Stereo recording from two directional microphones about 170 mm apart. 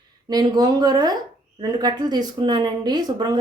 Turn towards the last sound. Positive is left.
turn(degrees=-25)  # may be behind; listen again after turning